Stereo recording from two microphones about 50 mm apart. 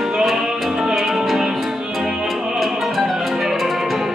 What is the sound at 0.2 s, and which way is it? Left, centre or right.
Music, centre.